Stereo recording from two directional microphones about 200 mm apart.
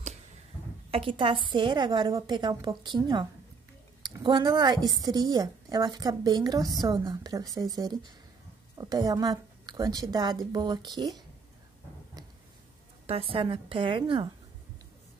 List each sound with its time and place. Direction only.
0.9 s a woman's voice: 25° right (ahead or behind)
13.0 s a woman's voice: 30° right (ahead or behind)